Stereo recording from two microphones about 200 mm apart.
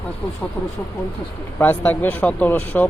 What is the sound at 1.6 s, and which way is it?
Speech, 10° left (ahead or behind).